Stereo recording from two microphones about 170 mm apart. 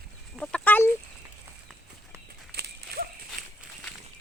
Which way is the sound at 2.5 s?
60° right (ahead or behind).